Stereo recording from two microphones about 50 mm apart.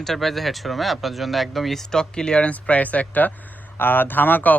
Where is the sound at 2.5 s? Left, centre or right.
Left.